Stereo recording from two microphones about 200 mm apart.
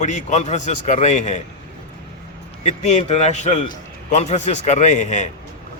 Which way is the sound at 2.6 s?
35° left (ahead or behind).